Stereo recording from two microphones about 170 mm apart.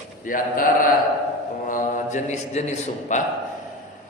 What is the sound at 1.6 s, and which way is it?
A man's voice, 50° left (ahead or behind).